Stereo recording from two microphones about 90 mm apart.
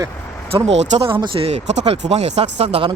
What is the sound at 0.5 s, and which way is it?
Speech, 70° right (ahead or behind).